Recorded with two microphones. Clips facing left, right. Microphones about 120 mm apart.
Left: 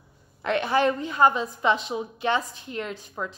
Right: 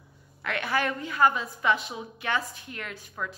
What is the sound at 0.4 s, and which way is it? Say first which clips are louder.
A woman's voice: left 6 dB; 25° left (ahead or behind).